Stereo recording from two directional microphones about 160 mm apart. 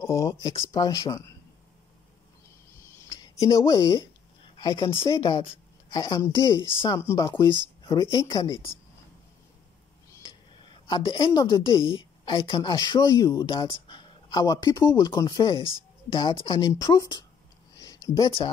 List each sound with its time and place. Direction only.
0.0 s speech: 20° left (ahead or behind)
3.2 s a woman's voice: 20° left (ahead or behind)
10.2 s speech: 30° left (ahead or behind)
17.7 s a sound: 20° left (ahead or behind)